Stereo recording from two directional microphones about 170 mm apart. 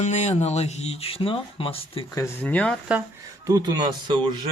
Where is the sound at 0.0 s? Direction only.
40° left (ahead or behind).